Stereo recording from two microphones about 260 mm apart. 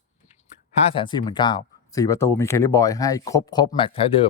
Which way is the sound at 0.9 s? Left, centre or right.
Centre.